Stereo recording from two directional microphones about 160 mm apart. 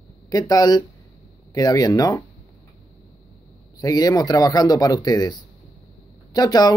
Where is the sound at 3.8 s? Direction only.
25° left (ahead or behind).